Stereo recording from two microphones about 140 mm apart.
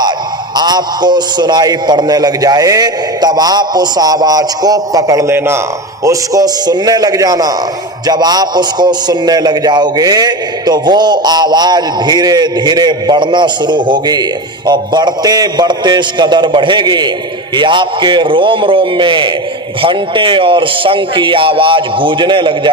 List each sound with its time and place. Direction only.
0.5 s a man's voice: 30° right (ahead or behind)